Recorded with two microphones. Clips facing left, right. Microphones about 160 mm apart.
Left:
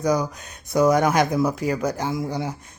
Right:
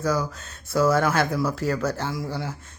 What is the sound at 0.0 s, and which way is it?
Speech, 15° left (ahead or behind).